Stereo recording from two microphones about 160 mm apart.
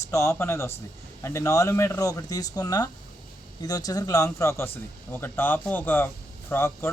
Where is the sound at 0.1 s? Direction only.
20° left (ahead or behind).